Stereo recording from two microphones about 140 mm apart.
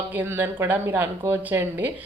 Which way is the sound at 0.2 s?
15° right (ahead or behind).